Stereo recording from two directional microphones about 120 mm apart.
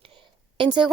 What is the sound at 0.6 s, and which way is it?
Speech, 40° right (ahead or behind).